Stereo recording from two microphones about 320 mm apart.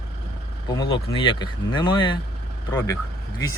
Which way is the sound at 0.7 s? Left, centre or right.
Centre.